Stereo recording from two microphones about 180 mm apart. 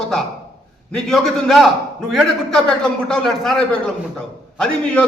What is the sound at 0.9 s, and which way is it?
A man's voice, centre (ahead or behind).